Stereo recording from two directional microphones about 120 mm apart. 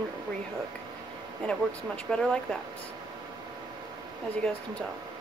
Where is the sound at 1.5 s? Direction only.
5° left (ahead or behind).